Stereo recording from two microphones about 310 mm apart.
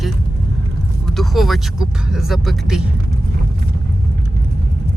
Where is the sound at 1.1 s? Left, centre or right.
Centre.